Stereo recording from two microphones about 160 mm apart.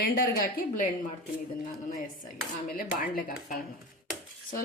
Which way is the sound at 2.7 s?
60° left (ahead or behind).